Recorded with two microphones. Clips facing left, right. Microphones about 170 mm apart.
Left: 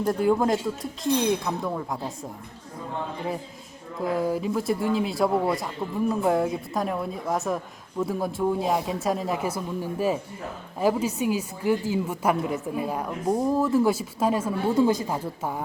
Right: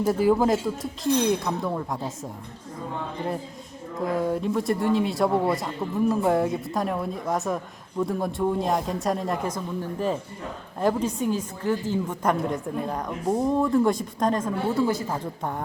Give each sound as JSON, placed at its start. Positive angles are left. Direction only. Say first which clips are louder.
{"t": 0.0, "sound": "speech", "louder": "right 2 dB", "side_deg": -5}
{"t": 4.0, "sound": "a woman's voice", "louder": "even", "side_deg": 0}
{"t": 14.8, "sound": "a woman's voice", "louder": "left 5 dB", "side_deg": 20}